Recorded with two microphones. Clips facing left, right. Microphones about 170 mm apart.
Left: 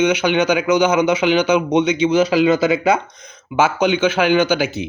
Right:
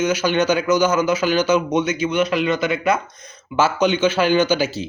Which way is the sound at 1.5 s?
15° left (ahead or behind).